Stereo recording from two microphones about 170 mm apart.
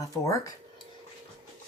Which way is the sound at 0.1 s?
20° left (ahead or behind).